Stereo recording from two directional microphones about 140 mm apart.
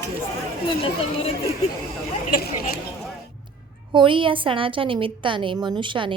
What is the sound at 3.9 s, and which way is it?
A woman's voice, 35° right (ahead or behind).